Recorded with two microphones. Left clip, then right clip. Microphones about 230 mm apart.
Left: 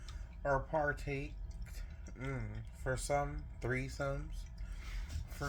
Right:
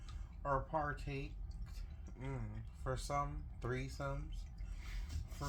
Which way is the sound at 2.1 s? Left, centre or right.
Left.